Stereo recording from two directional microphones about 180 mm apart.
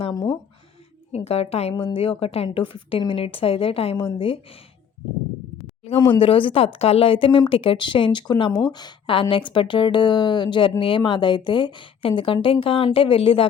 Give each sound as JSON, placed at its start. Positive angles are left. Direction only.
{"t": 0.0, "sound": "speech", "side_deg": 20}
{"t": 1.1, "sound": "a woman's voice", "side_deg": 35}
{"t": 6.0, "sound": "a woman's voice", "side_deg": 30}